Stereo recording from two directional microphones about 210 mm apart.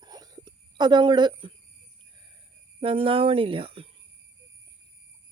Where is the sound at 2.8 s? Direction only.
25° right (ahead or behind).